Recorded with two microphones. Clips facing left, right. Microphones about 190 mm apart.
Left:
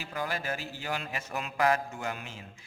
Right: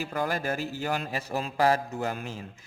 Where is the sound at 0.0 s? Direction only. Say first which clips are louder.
Right 5 dB; 45° right (ahead or behind).